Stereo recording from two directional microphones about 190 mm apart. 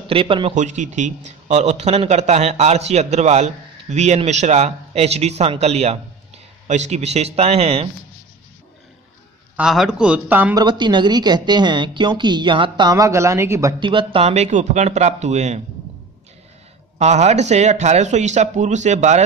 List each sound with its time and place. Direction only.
0.1 s a woman's voice: 30° right (ahead or behind)
0.6 s a man's voice: 40° right (ahead or behind)
9.6 s a man's voice: 5° right (ahead or behind)
10.5 s a woman's voice: 25° right (ahead or behind)
17.0 s a man's voice: 35° right (ahead or behind)